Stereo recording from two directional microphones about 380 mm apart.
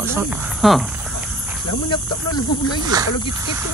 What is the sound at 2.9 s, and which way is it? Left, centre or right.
Speech, centre.